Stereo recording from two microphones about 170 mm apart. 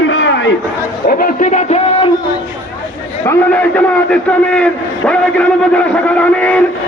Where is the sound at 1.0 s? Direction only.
55° left (ahead or behind).